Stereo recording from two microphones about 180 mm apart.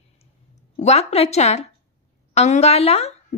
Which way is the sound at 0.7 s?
35° left (ahead or behind).